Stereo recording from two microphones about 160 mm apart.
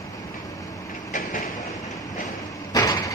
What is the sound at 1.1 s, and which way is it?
Train, 55° left (ahead or behind).